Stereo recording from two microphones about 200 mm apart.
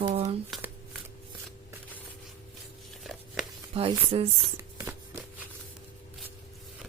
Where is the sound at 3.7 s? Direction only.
30° right (ahead or behind).